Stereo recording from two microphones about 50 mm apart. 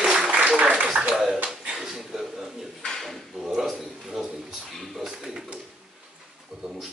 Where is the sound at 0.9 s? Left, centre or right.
Centre.